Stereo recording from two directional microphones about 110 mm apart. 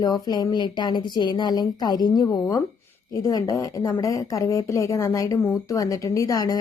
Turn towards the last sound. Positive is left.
turn(degrees=35)  # may be behind; listen again after turning